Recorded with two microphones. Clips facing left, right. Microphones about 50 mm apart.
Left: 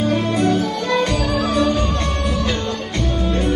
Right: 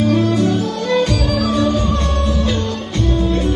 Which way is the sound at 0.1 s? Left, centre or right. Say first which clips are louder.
Right 2 dB; left.